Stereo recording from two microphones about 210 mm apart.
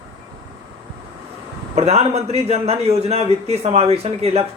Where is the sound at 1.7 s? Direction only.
30° right (ahead or behind).